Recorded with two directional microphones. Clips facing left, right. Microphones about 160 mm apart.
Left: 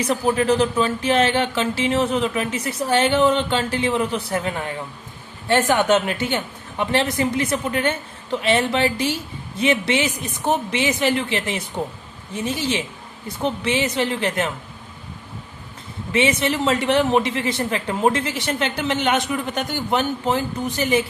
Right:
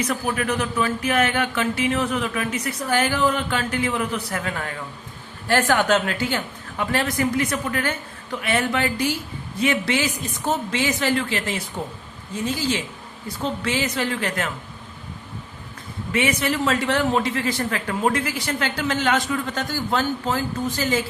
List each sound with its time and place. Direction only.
0.0 s speech: 25° left (ahead or behind)
16.1 s speech: 25° left (ahead or behind)